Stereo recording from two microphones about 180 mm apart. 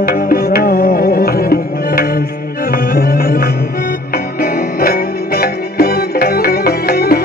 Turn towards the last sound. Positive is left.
turn(degrees=60)  # may be behind; listen again after turning